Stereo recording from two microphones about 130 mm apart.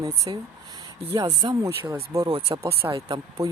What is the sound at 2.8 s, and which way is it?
Speech, 25° right (ahead or behind).